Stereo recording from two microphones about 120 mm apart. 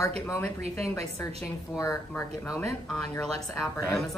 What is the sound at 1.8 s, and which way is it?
Speech, 25° left (ahead or behind).